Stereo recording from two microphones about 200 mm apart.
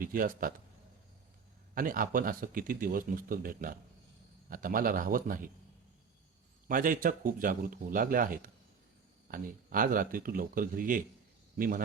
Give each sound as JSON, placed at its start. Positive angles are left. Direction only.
{"t": 0.0, "sound": "speech", "side_deg": -45}
{"t": 1.7, "sound": "speech", "side_deg": -45}
{"t": 6.7, "sound": "a man's voice", "side_deg": -45}